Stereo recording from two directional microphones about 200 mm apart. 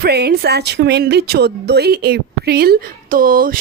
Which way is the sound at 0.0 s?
55° right (ahead or behind).